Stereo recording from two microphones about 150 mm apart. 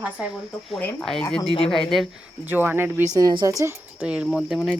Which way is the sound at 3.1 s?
25° right (ahead or behind).